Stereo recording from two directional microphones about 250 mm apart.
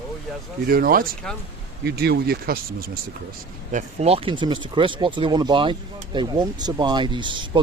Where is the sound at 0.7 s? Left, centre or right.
Right.